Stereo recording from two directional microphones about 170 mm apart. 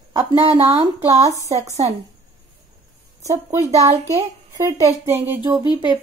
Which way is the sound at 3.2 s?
20° right (ahead or behind).